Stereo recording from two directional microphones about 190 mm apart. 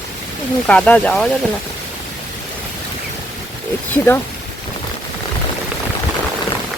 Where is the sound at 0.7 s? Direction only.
5° left (ahead or behind).